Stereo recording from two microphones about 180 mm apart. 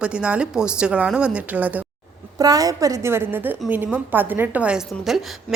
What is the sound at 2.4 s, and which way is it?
A woman's voice, 20° right (ahead or behind).